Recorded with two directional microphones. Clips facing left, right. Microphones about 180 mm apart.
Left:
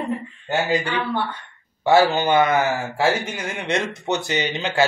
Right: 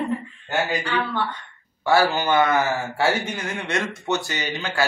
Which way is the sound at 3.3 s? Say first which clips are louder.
Left 2 dB; 20° left (ahead or behind).